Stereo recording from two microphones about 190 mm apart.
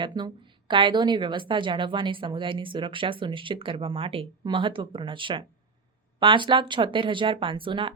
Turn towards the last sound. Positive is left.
turn(degrees=-25)  # may be behind; listen again after turning